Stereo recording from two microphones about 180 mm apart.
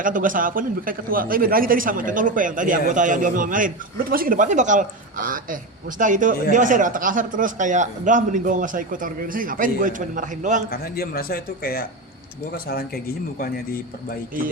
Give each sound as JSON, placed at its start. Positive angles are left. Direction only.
{"t": 0.0, "sound": "speech", "side_deg": -50}
{"t": 10.7, "sound": "speech", "side_deg": 60}